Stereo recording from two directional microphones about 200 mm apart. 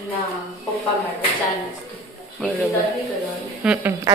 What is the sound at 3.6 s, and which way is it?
Speech, 5° right (ahead or behind).